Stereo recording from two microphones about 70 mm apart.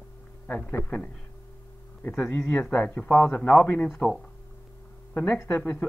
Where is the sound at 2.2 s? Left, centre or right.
Centre.